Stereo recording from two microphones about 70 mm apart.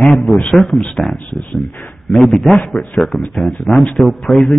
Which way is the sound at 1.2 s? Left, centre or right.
Centre.